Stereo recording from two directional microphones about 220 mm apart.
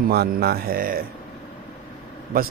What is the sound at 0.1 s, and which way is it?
Speech, 45° right (ahead or behind).